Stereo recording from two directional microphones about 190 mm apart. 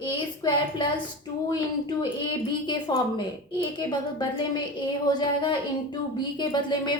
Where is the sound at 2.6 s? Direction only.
20° left (ahead or behind).